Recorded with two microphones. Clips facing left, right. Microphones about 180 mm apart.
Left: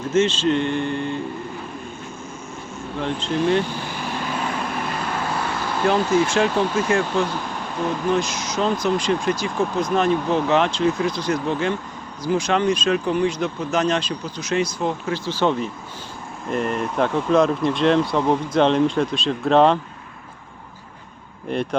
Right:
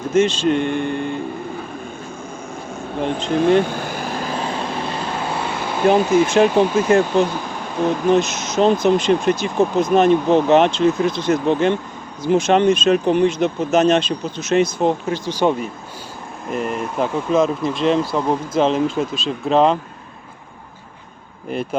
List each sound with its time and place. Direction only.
0.1 s speech: 15° right (ahead or behind)
3.2 s vehicle: 50° right (ahead or behind); by 7.3 s 20° right (ahead or behind)
8.1 s speech: 20° right (ahead or behind)
16.5 s speech: 5° right (ahead or behind)
21.5 s speech: 5° right (ahead or behind)